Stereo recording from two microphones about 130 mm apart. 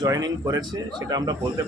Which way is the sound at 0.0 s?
30° right (ahead or behind).